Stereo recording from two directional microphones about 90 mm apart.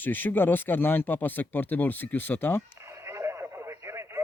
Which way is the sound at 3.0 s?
30° right (ahead or behind).